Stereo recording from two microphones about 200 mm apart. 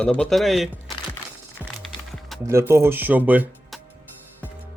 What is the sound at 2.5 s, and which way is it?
Speech, 15° right (ahead or behind).